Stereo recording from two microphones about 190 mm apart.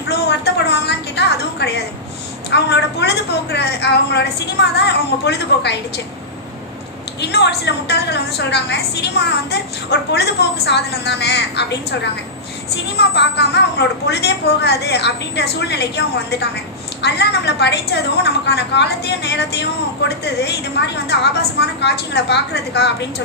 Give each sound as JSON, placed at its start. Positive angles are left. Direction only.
{"t": 0.1, "sound": "a sound", "side_deg": 60}
{"t": 2.5, "sound": "a woman's voice", "side_deg": 60}
{"t": 7.2, "sound": "a woman's voice", "side_deg": 60}
{"t": 13.0, "sound": "a woman's voice", "side_deg": 60}
{"t": 17.0, "sound": "a woman's voice", "side_deg": 60}